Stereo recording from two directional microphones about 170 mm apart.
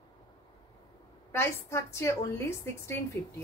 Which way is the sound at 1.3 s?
15° left (ahead or behind).